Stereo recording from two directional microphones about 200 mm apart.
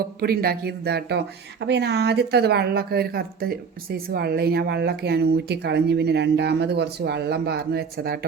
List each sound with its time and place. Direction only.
0.2 s speech: 50° right (ahead or behind)